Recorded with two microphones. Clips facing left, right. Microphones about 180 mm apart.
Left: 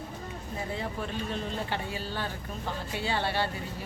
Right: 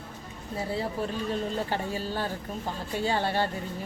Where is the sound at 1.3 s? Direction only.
40° right (ahead or behind).